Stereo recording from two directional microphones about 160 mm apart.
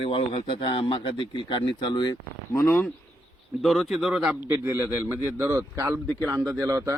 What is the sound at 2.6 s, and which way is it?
Speech, 15° left (ahead or behind).